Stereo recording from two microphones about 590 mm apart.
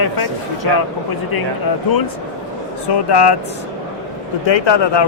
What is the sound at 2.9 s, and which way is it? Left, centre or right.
Speech, left.